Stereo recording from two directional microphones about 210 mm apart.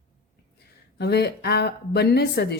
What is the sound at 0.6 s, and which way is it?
Speech, 50° left (ahead or behind).